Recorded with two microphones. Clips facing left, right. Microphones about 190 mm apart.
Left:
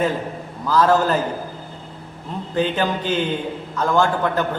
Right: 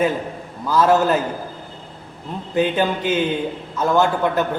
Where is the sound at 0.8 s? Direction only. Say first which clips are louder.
Right 1 dB; 10° right (ahead or behind).